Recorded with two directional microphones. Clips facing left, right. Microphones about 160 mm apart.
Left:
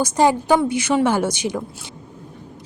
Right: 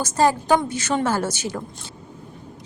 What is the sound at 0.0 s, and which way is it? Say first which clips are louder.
Speech: left 3 dB; 15° left (ahead or behind).